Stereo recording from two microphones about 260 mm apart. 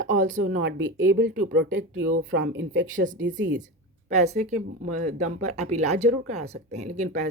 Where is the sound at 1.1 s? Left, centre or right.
Right.